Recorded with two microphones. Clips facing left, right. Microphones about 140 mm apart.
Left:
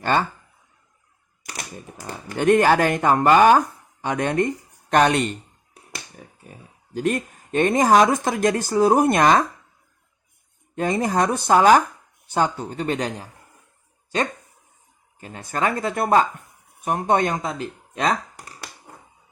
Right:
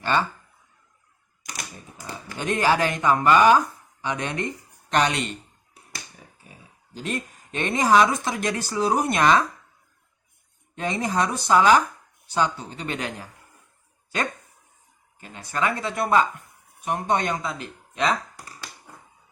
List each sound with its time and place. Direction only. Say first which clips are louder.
0.0 s speech: left 2 dB; 50° left (ahead or behind)
2.0 s speech: left 10 dB; 55° left (ahead or behind)
6.2 s a sound: left 6 dB; 50° left (ahead or behind)
6.9 s speech: left 7 dB; 50° left (ahead or behind)
10.8 s speech: left 4 dB; 45° left (ahead or behind)
15.2 s speech: left 2 dB; 45° left (ahead or behind)